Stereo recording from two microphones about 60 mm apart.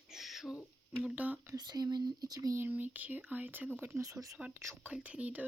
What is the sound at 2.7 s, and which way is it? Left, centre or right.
Speech, right.